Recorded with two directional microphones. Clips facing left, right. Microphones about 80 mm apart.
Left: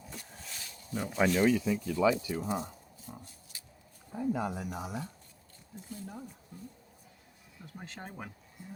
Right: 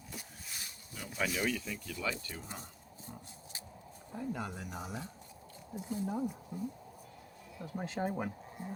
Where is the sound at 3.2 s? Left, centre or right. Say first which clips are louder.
Right 3 dB; right.